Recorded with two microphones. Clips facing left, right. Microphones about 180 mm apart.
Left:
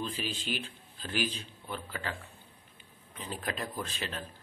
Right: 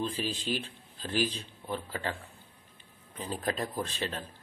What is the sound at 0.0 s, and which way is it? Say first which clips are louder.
A man's voice: right 3 dB; 35° right (ahead or behind).